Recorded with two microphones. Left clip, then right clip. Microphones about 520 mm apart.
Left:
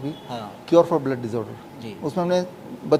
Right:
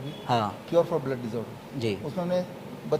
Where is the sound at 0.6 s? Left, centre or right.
Left.